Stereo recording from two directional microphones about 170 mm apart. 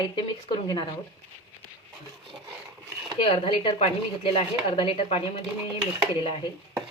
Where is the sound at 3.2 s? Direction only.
30° left (ahead or behind).